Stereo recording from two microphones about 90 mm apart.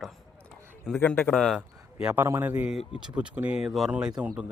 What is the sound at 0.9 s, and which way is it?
Speech, 20° left (ahead or behind).